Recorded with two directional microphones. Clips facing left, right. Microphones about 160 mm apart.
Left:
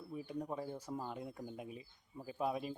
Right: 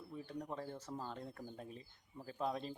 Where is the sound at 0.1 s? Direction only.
10° left (ahead or behind).